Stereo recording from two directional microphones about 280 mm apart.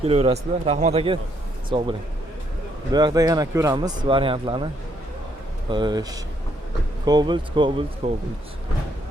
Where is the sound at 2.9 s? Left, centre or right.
Centre.